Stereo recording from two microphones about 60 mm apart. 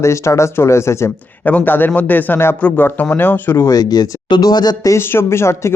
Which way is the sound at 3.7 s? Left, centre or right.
Left.